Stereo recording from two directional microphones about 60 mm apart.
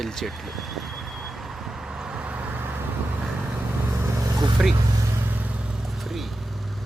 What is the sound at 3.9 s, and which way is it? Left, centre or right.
Vehicle, right.